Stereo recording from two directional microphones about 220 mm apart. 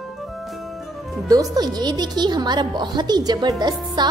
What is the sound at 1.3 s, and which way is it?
Speech, 15° right (ahead or behind).